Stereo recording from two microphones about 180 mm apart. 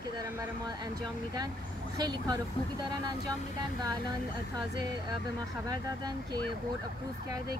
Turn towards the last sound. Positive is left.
turn(degrees=-20)  # may be behind; listen again after turning